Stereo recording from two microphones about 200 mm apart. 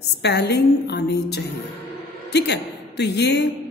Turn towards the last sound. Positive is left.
turn(degrees=55)  # may be behind; listen again after turning